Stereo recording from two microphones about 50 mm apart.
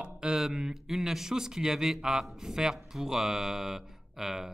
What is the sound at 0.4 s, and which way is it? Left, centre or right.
Speech, centre.